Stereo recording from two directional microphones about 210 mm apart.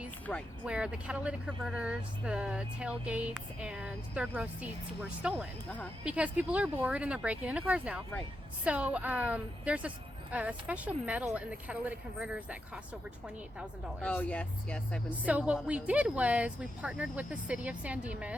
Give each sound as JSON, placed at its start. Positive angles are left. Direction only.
{"t": 0.3, "sound": "a woman's voice", "side_deg": 5}
{"t": 14.0, "sound": "speech", "side_deg": 5}
{"t": 15.3, "sound": "speech", "side_deg": -5}